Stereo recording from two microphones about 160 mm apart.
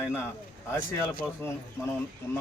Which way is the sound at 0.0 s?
15° left (ahead or behind).